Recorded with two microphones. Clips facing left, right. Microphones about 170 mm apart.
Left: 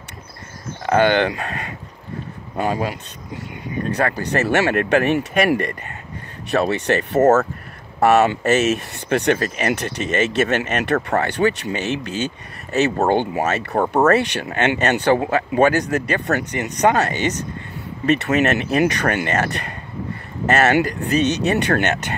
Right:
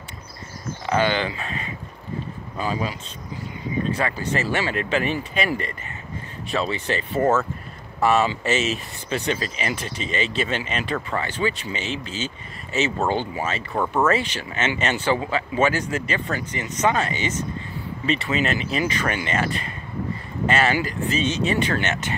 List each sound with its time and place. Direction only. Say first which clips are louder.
0.8 s speech: left 6 dB; 60° left (ahead or behind)
7.2 s speech: left 6 dB; 40° left (ahead or behind)
8.0 s speech: left 5 dB; 65° left (ahead or behind)
13.7 s speech: left 5 dB; 40° left (ahead or behind)
14.1 s speech: left 6 dB; 65° left (ahead or behind)
19.1 s speech: left 4 dB; 50° left (ahead or behind)
20.6 s speech: left 5 dB; 65° left (ahead or behind)